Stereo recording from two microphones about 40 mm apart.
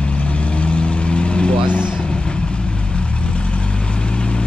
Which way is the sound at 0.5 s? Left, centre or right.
Left.